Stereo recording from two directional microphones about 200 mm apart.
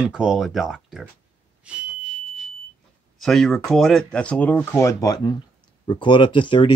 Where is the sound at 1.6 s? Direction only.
5° right (ahead or behind).